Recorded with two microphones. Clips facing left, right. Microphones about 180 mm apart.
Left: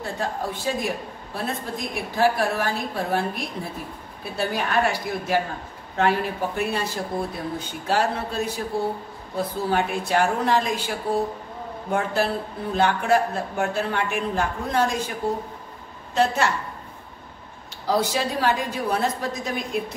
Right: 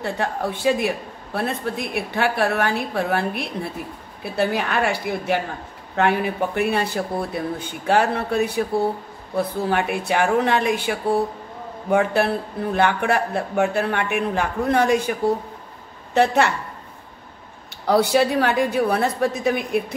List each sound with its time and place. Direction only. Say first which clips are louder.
0.0 s a man's voice: right 4 dB; 70° right (ahead or behind)
17.8 s speech: right 6 dB; 65° right (ahead or behind)